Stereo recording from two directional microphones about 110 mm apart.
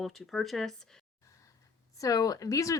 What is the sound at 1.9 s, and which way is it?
Speech, 30° left (ahead or behind).